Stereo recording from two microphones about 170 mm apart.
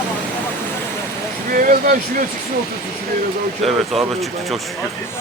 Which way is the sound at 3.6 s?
Centre (ahead or behind).